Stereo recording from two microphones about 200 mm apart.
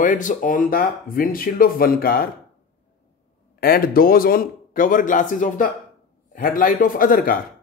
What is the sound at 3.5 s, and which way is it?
Speech, 50° left (ahead or behind).